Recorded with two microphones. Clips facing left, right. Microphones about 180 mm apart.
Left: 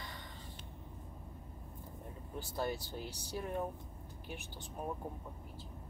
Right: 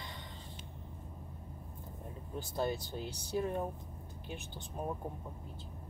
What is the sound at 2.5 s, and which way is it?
Speech, 20° right (ahead or behind).